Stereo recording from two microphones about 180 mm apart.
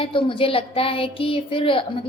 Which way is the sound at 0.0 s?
30° left (ahead or behind).